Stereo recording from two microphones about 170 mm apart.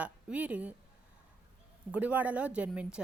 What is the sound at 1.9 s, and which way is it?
A woman's voice, 10° right (ahead or behind).